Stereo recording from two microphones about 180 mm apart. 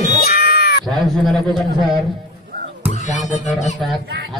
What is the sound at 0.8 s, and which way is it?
A man's voice, centre (ahead or behind).